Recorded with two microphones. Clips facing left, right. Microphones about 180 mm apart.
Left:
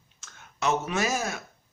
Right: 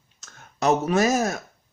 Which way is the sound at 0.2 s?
40° right (ahead or behind).